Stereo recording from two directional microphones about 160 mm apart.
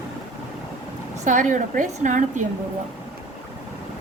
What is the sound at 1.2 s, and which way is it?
A woman's voice, 50° right (ahead or behind).